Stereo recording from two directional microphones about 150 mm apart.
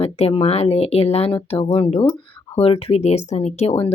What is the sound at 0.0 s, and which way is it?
Speech, 40° left (ahead or behind).